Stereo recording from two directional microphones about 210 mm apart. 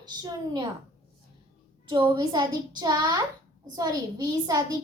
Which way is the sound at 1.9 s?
20° right (ahead or behind).